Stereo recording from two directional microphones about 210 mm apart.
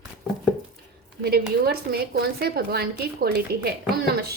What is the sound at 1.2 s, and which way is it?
A woman's voice, 50° right (ahead or behind).